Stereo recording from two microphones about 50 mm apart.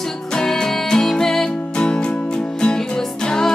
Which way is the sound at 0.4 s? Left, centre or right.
Centre.